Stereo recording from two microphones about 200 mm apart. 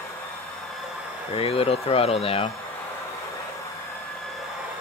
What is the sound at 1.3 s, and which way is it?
Speech, 30° left (ahead or behind).